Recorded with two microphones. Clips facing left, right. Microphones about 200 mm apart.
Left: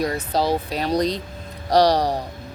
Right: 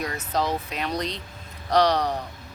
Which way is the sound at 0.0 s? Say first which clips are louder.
Left 5 dB; 35° left (ahead or behind).